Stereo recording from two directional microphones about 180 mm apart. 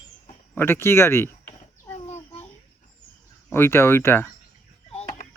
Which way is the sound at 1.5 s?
35° left (ahead or behind).